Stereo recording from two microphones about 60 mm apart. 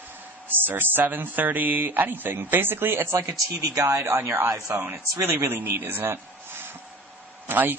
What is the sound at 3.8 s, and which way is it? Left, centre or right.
Speech, right.